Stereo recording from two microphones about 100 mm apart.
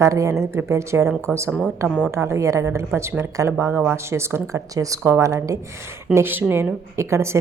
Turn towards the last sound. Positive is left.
turn(degrees=-25)  # may be behind; listen again after turning